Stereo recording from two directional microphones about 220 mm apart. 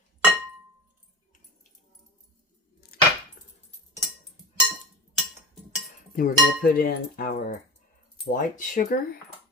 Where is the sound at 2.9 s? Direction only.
45° left (ahead or behind).